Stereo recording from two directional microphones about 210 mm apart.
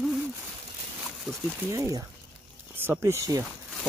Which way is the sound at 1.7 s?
15° right (ahead or behind).